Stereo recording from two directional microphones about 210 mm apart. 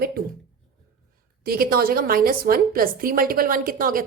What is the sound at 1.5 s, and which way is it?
A woman's voice, 45° right (ahead or behind).